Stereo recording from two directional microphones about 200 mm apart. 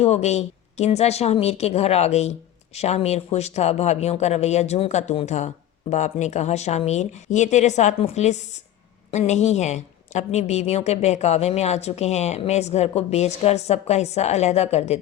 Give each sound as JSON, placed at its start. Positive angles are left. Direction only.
{"t": 0.0, "sound": "a woman's voice", "side_deg": 35}